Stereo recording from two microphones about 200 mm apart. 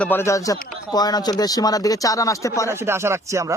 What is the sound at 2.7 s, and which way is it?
Speech, 10° right (ahead or behind).